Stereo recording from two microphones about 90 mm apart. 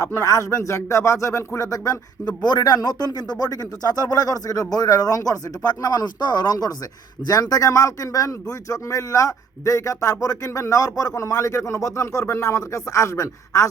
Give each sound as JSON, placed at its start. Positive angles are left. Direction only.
{"t": 0.0, "sound": "speech", "side_deg": 40}